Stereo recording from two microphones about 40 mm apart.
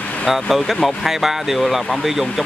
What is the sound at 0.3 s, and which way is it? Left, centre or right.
Speech, centre.